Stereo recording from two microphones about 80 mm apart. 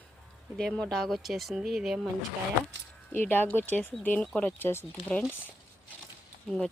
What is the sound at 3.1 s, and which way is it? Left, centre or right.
Speech, left.